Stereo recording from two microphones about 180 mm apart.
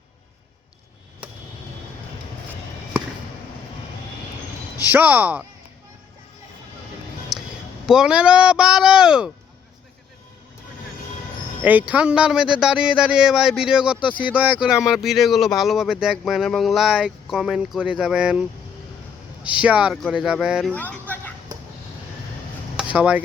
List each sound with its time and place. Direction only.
4.8 s speech: 10° right (ahead or behind)
7.3 s a sound: centre (ahead or behind)
7.9 s speech: 5° right (ahead or behind)
11.6 s speech: 10° right (ahead or behind)
14.0 s speech: 25° left (ahead or behind)
14.3 s speech: 5° right (ahead or behind)
19.5 s speech: 5° right (ahead or behind)
20.7 s speech: 10° left (ahead or behind)
22.8 s speech: 5° right (ahead or behind)